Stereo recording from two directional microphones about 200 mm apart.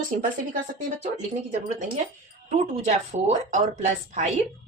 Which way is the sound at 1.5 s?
40° right (ahead or behind).